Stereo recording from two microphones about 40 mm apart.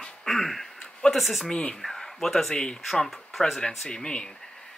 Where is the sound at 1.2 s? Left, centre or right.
Centre.